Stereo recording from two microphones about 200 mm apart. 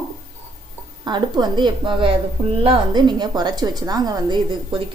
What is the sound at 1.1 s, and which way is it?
A woman's voice, 20° right (ahead or behind).